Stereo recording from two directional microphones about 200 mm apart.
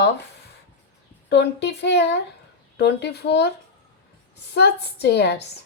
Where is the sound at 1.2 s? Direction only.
60° left (ahead or behind).